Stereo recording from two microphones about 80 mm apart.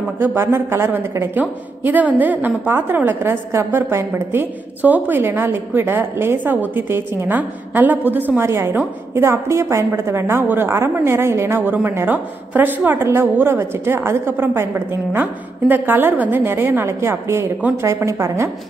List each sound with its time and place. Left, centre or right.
0.2 s a woman's voice: right